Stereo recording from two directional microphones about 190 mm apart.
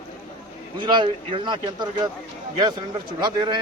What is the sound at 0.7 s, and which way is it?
A man's voice, 25° right (ahead or behind).